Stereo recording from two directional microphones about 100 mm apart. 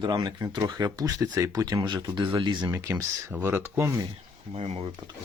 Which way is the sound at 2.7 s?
30° right (ahead or behind).